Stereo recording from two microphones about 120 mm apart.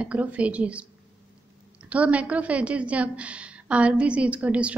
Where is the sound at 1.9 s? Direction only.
10° right (ahead or behind).